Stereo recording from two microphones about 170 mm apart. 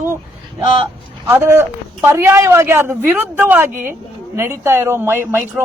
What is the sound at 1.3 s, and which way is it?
Speech, 15° right (ahead or behind).